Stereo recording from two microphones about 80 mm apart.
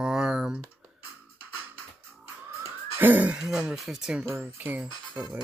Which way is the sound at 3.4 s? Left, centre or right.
Centre.